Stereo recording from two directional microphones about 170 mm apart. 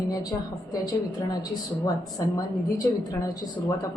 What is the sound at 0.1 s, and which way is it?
Speech, 20° left (ahead or behind).